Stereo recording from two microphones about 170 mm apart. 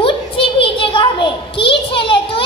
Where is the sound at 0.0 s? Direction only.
30° left (ahead or behind).